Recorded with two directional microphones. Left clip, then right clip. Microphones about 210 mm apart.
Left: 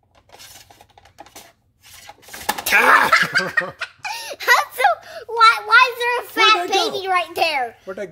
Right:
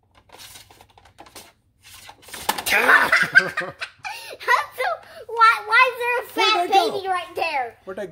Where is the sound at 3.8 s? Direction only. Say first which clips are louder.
Left 4 dB; 45° left (ahead or behind).